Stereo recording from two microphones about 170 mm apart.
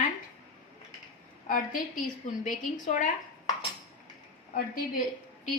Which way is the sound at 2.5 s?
50° left (ahead or behind).